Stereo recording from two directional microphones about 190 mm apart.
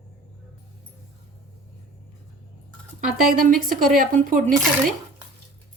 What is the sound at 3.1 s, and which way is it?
Speech, 45° right (ahead or behind).